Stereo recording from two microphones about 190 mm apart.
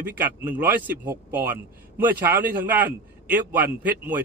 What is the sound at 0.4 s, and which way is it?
Speech, 10° right (ahead or behind).